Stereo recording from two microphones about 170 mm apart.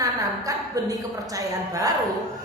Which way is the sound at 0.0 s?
20° right (ahead or behind).